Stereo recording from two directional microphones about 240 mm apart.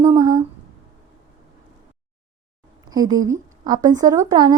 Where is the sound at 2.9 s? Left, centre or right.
Centre.